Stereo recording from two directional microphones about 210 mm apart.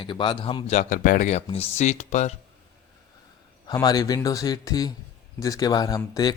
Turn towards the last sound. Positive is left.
turn(degrees=20)  # may be behind; listen again after turning